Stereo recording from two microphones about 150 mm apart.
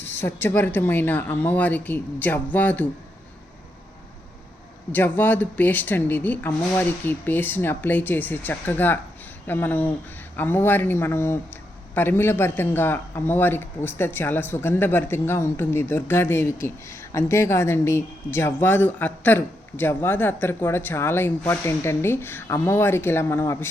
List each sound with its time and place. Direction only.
0.0 s speech: 15° left (ahead or behind)
4.9 s speech: 10° left (ahead or behind)